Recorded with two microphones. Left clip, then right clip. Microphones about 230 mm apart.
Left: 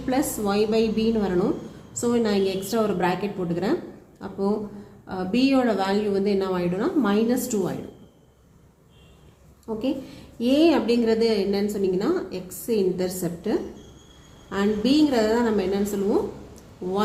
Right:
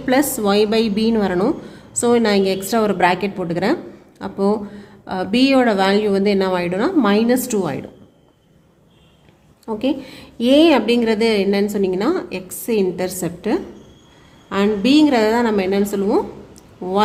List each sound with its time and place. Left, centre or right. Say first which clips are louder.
0.1 s a woman's voice: right 8 dB; right
9.6 s a woman's voice: right 6 dB; right